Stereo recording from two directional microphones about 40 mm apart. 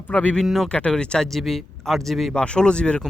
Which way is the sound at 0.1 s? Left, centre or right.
Left.